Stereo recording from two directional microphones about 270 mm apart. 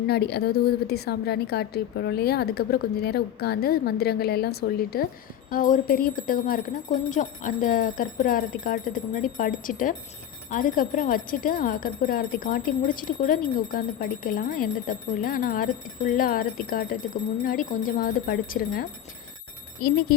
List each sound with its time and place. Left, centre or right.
0.1 s speech: left